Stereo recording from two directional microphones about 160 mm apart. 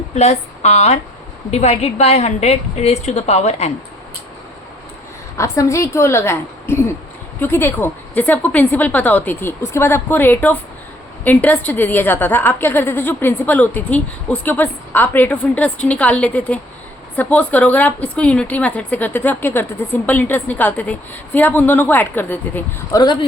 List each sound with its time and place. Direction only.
0.1 s a woman's voice: 45° left (ahead or behind)
5.4 s a woman's voice: 20° left (ahead or behind)